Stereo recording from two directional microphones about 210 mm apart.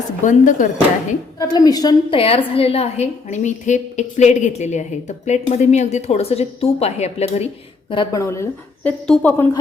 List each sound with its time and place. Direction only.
0.3 s speech: 35° left (ahead or behind)
1.4 s a woman's voice: 20° left (ahead or behind)